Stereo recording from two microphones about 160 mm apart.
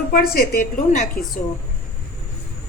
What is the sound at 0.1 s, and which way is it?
A woman's voice, 65° left (ahead or behind).